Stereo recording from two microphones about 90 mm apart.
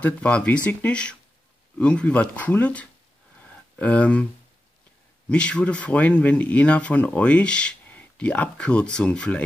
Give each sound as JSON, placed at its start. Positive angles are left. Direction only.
{"t": 0.0, "sound": "speech", "side_deg": 15}
{"t": 3.3, "sound": "a sound", "side_deg": 15}
{"t": 5.3, "sound": "speech", "side_deg": 15}